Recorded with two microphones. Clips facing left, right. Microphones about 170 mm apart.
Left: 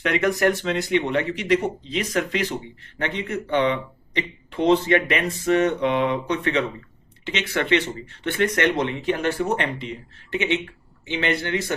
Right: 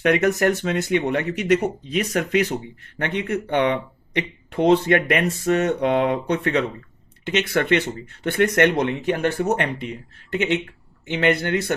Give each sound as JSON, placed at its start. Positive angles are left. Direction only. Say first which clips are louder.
{"t": 0.0, "sound": "speech", "louder": "right 2 dB", "side_deg": -50}
{"t": 11.0, "sound": "speech", "louder": "right 4 dB", "side_deg": -55}